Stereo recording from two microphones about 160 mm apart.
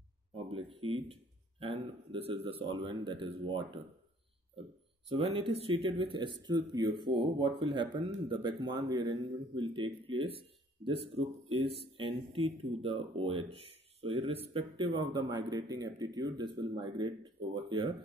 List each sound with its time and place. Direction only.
0.5 s speech: 35° right (ahead or behind)